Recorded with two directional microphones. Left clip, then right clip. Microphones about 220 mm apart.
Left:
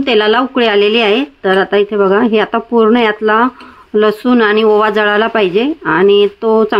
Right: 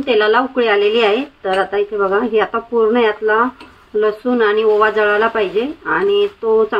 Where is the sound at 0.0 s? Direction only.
50° left (ahead or behind).